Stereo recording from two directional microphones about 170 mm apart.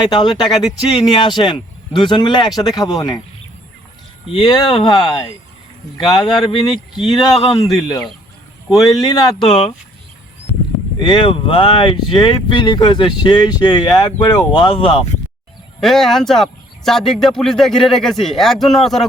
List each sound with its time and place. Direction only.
0.0 s speech: 25° left (ahead or behind)
4.3 s speech: 30° left (ahead or behind)
9.4 s speech: centre (ahead or behind)
11.0 s speech: 30° left (ahead or behind)
15.8 s speech: centre (ahead or behind)